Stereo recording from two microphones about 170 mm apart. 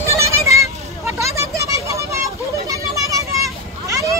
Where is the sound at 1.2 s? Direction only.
15° right (ahead or behind).